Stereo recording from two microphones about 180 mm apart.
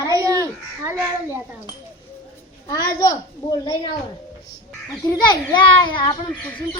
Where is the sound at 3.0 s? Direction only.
20° left (ahead or behind).